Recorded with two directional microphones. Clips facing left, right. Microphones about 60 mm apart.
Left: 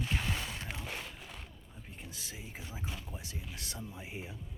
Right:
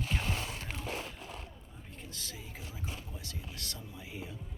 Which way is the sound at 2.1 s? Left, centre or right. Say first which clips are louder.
Right 1 dB; centre.